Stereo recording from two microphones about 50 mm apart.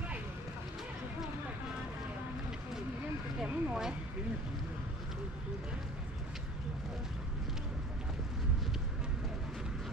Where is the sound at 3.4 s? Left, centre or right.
Centre.